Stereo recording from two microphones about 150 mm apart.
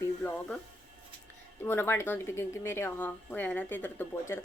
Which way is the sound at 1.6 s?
15° left (ahead or behind).